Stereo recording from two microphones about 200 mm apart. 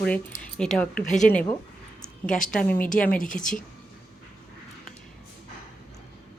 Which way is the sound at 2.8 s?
45° left (ahead or behind).